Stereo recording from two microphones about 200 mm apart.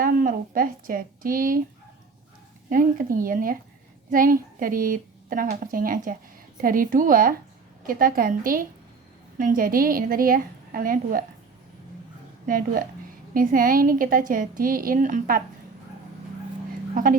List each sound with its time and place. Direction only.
0.0 s speech: 45° right (ahead or behind)
2.6 s a woman's voice: 45° right (ahead or behind)
12.5 s a woman's voice: 45° right (ahead or behind)
16.9 s a woman's voice: 45° right (ahead or behind)